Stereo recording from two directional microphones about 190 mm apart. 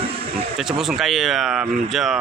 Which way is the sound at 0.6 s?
Centre (ahead or behind).